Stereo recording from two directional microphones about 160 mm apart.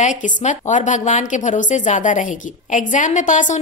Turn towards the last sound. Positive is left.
turn(degrees=50)  # may be behind; listen again after turning